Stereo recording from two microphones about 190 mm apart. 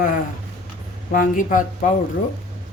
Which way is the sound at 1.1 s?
45° left (ahead or behind).